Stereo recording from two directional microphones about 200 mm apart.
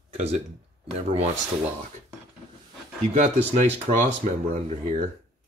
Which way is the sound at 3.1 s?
35° right (ahead or behind).